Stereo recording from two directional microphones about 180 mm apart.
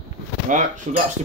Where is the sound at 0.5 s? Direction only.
45° right (ahead or behind).